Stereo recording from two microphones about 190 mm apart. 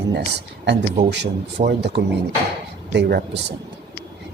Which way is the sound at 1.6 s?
60° right (ahead or behind).